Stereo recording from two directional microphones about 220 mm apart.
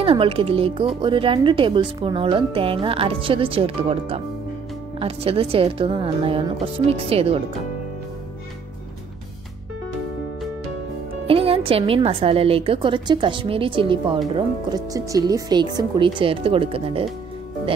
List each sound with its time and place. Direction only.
0.0 s speech: 25° right (ahead or behind)
11.2 s speech: 25° right (ahead or behind)